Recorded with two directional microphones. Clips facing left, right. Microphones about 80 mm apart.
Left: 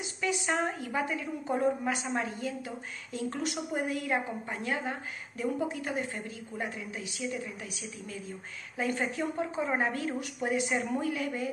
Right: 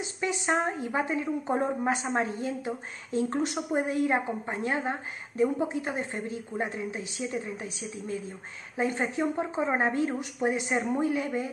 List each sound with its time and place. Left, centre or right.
0.0 s a woman's voice: right